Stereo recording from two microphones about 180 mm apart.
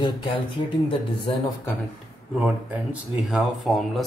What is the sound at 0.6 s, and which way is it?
Speech, 35° left (ahead or behind).